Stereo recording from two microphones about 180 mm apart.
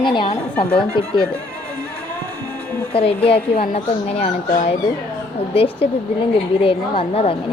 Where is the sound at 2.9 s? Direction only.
30° left (ahead or behind).